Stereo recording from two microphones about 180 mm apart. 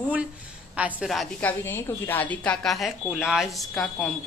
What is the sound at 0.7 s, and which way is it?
Speech, 10° right (ahead or behind).